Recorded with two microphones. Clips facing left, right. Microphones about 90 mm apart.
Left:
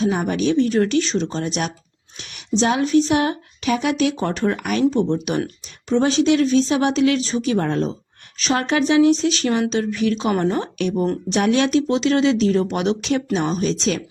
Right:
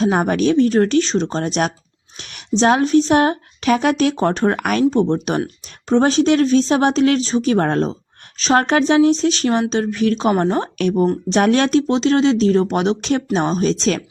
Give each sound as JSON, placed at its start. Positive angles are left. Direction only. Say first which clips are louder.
{"t": 0.0, "sound": "speech", "louder": "right 4 dB", "side_deg": -50}
{"t": 4.5, "sound": "speech", "louder": "right 2 dB", "side_deg": -55}
{"t": 4.9, "sound": "speech", "louder": "right 3 dB", "side_deg": -35}
{"t": 10.9, "sound": "speech", "louder": "right 4 dB", "side_deg": -25}
{"t": 11.3, "sound": "speech", "louder": "right 2 dB", "side_deg": -45}